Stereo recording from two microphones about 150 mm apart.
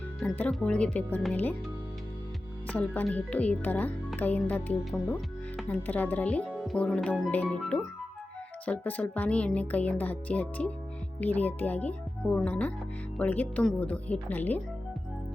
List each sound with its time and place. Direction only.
0.2 s speech: 10° left (ahead or behind)
2.6 s speech: 10° left (ahead or behind)
6.5 s music: 5° right (ahead or behind)
6.7 s speech: 10° left (ahead or behind)